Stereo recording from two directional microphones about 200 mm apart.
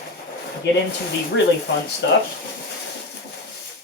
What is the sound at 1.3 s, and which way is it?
Speech, 65° left (ahead or behind).